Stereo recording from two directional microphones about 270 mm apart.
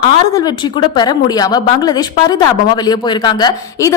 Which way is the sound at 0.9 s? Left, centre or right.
Centre.